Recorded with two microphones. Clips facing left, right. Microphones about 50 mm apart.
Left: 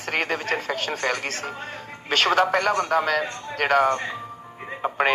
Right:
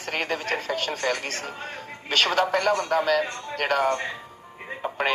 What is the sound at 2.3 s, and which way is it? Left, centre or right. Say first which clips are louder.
Speech: left 3 dB; left.